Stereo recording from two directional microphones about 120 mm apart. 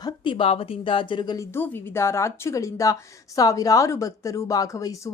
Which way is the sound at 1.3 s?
20° left (ahead or behind).